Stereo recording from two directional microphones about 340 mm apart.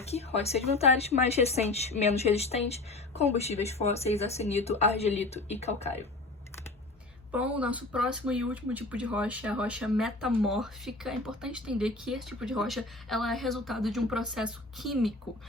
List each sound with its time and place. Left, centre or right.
0.0 s speech: centre
7.3 s speech: centre